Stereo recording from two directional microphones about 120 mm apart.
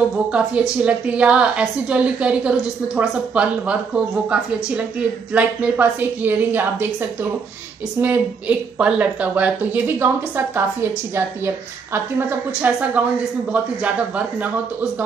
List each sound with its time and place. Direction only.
0.3 s a woman's voice: 10° right (ahead or behind)